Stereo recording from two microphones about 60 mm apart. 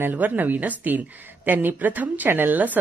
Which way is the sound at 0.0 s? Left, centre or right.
Right.